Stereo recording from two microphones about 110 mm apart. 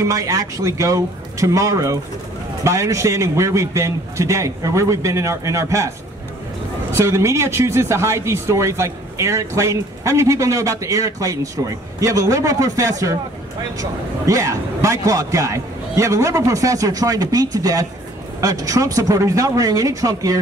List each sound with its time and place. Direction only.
0.0 s a man's voice: 30° right (ahead or behind)
6.9 s a man's voice: 25° right (ahead or behind)